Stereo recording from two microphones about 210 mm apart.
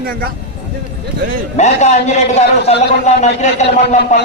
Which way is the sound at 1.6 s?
35° left (ahead or behind).